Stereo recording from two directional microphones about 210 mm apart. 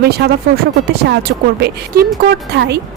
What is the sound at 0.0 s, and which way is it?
A woman's voice, 50° right (ahead or behind).